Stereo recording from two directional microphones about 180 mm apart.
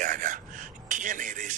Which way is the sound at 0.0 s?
45° right (ahead or behind).